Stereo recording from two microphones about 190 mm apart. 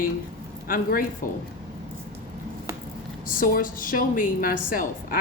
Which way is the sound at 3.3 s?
50° left (ahead or behind).